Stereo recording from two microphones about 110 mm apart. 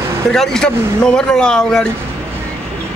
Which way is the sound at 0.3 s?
5° left (ahead or behind).